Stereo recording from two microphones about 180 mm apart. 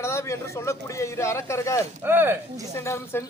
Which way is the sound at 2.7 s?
15° left (ahead or behind).